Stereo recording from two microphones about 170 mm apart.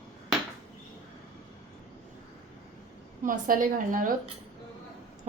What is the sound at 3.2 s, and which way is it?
Speech, 55° right (ahead or behind).